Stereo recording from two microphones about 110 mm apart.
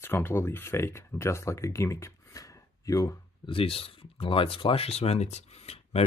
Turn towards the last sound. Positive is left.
turn(degrees=75)  # may be behind; listen again after turning